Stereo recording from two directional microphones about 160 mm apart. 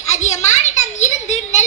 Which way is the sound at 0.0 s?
45° left (ahead or behind).